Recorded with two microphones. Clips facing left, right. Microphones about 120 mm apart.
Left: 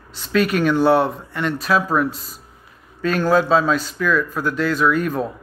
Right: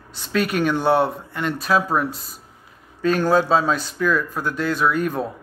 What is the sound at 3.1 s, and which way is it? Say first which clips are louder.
A man's voice: left 2 dB; 25° right (ahead or behind).